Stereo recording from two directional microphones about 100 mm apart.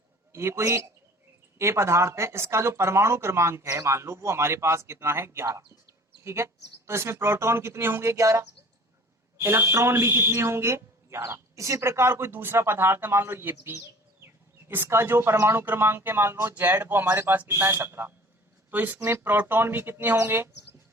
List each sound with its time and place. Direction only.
0.3 s a man's voice: 25° right (ahead or behind)